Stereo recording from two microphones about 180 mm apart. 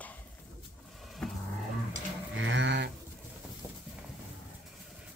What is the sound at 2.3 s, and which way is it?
Livestock, 90° right.